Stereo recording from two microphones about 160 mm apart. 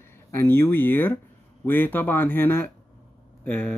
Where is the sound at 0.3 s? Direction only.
15° left (ahead or behind).